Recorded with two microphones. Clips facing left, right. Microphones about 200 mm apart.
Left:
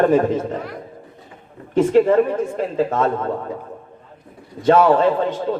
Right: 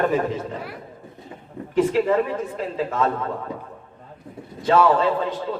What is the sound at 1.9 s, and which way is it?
Speech, 45° left (ahead or behind).